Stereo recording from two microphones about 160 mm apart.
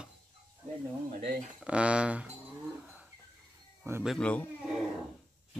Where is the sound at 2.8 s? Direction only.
10° right (ahead or behind).